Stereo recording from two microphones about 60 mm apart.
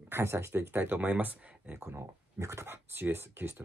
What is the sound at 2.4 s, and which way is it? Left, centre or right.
Speech, right.